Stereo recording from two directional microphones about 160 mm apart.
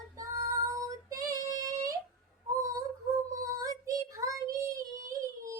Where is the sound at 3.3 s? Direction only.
20° right (ahead or behind).